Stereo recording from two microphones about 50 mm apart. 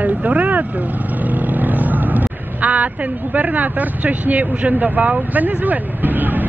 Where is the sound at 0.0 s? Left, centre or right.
Right.